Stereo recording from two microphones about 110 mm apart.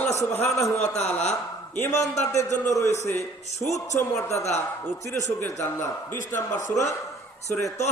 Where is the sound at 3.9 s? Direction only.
25° left (ahead or behind).